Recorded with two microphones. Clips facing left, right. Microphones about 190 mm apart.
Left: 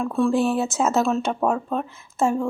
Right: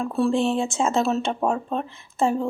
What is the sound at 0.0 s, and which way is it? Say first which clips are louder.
Speech: left 1 dB; 35° right (ahead or behind).